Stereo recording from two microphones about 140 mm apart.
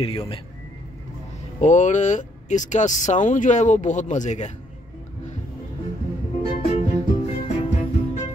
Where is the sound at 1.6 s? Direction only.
60° left (ahead or behind).